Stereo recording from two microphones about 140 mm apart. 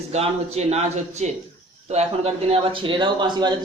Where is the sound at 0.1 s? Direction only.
50° right (ahead or behind).